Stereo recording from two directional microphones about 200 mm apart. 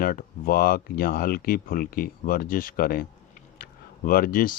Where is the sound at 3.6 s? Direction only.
45° left (ahead or behind).